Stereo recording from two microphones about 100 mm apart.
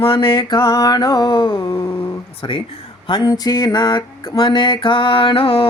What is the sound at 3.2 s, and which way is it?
Music, 40° left (ahead or behind).